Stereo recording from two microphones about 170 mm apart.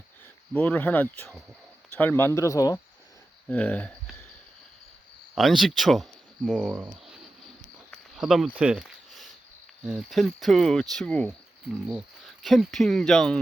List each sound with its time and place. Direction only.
0.5 s speech: 10° left (ahead or behind)
3.5 s speech: 10° left (ahead or behind)
5.3 s speech: centre (ahead or behind)
7.9 s a sound: centre (ahead or behind)
9.8 s speech: centre (ahead or behind)
11.3 s speech: 5° right (ahead or behind)